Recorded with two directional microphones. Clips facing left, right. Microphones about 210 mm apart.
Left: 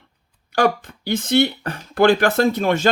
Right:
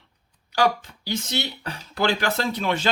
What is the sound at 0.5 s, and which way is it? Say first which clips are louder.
Speech: left 4 dB; 55° left (ahead or behind).